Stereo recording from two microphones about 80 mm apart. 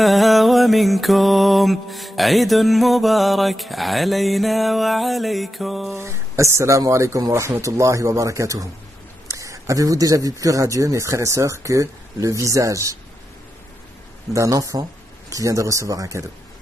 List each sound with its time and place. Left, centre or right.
0.0 s music: centre
5.9 s speech: right
14.3 s speech: right